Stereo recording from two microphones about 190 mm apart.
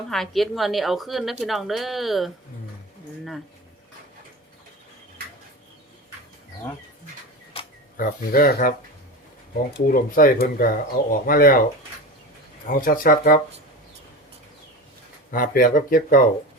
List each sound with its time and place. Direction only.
0.1 s a woman's voice: centre (ahead or behind)
7.9 s speech: 50° left (ahead or behind)
9.7 s speech: 45° left (ahead or behind)
12.6 s speech: 45° left (ahead or behind)
15.3 s speech: 50° left (ahead or behind)